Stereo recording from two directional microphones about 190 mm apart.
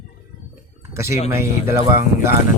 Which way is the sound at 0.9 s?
15° right (ahead or behind).